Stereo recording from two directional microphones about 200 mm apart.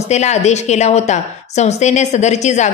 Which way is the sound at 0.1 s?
35° left (ahead or behind).